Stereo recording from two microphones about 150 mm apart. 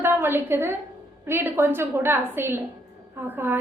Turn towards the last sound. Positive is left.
turn(degrees=-15)  # may be behind; listen again after turning